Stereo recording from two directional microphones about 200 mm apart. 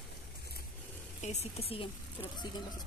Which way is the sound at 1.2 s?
35° left (ahead or behind).